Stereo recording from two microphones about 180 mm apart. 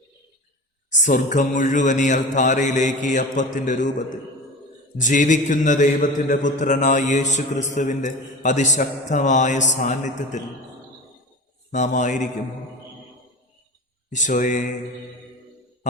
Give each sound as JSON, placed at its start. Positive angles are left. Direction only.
{"t": 0.9, "sound": "mantra", "side_deg": 45}
{"t": 4.9, "sound": "mantra", "side_deg": 45}
{"t": 11.7, "sound": "speech", "side_deg": 40}
{"t": 14.1, "sound": "mantra", "side_deg": 45}